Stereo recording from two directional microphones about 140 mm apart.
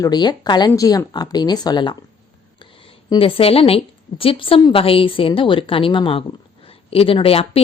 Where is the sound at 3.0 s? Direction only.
40° left (ahead or behind).